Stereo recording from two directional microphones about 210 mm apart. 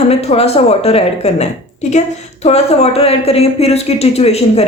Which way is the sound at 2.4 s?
30° left (ahead or behind).